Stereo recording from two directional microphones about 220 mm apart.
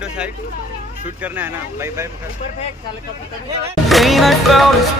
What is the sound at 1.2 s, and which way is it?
Speech, 10° right (ahead or behind).